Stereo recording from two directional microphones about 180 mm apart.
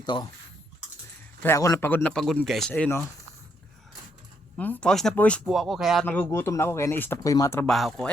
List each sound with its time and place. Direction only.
0.0 s speech: 25° left (ahead or behind)
1.4 s a man's voice: 15° left (ahead or behind)
4.5 s a man's voice: 10° left (ahead or behind)
6.1 s a man's voice: 10° left (ahead or behind)
7.6 s speech: centre (ahead or behind)